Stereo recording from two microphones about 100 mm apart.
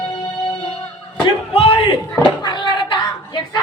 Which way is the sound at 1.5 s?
75° left (ahead or behind).